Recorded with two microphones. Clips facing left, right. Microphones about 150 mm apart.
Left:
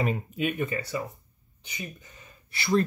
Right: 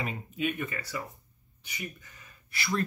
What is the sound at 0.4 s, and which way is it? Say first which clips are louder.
Speech: left 2 dB; 30° left (ahead or behind).